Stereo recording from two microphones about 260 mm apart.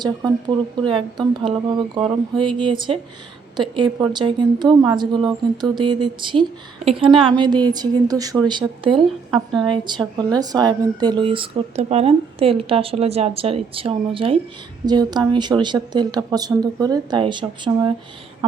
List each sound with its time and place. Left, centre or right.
0.0 s speech: centre